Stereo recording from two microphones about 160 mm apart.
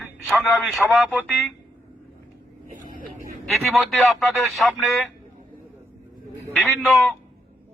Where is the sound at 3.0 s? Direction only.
60° right (ahead or behind).